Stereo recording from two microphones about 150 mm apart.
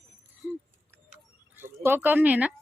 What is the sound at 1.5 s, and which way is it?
Speech, 15° right (ahead or behind).